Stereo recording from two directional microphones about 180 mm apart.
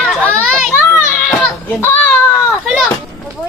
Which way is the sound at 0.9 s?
10° left (ahead or behind).